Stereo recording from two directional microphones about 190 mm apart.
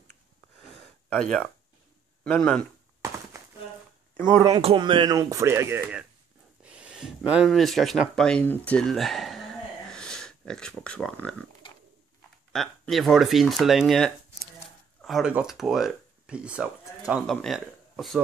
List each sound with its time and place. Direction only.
1.1 s speech: 5° left (ahead or behind)
3.3 s a sound: 15° right (ahead or behind)
4.2 s speech: 10° left (ahead or behind)
4.6 s speech: 30° right (ahead or behind); by 11.3 s 5° left (ahead or behind)
12.5 s speech: centre (ahead or behind)